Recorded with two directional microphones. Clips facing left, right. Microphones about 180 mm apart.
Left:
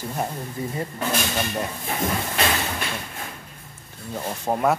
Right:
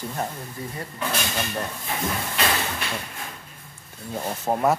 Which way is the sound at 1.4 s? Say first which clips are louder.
Left 2 dB; 15° left (ahead or behind).